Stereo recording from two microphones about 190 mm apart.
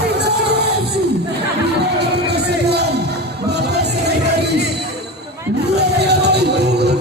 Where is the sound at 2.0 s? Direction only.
60° right (ahead or behind).